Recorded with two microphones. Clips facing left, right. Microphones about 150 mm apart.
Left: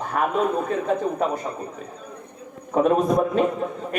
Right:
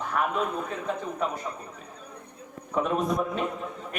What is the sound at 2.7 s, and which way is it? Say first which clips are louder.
Speech: left 7 dB; 40° left (ahead or behind).